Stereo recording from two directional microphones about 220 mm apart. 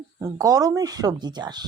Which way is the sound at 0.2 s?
15° right (ahead or behind).